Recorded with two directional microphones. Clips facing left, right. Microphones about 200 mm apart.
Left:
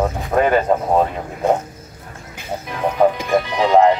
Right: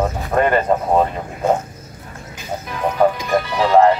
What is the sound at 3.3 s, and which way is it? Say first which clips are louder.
Speech: even; 20° left (ahead or behind).